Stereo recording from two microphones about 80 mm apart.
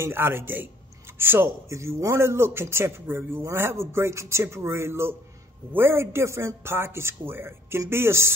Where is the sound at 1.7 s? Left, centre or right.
Right.